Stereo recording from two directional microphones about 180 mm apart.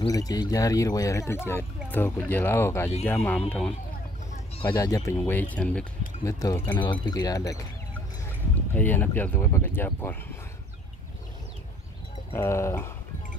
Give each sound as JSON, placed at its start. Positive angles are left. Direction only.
{"t": 0.0, "sound": "speech", "side_deg": 20}
{"t": 4.6, "sound": "speech", "side_deg": 20}
{"t": 12.3, "sound": "speech", "side_deg": 15}